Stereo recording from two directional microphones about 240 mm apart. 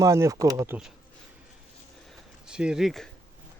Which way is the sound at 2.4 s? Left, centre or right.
Centre.